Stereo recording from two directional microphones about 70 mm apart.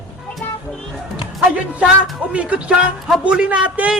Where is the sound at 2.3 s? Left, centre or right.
Centre.